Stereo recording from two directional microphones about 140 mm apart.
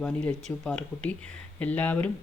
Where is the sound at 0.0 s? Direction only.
5° left (ahead or behind).